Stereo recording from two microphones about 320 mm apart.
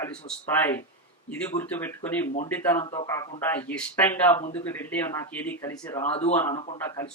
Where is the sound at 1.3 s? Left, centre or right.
Centre.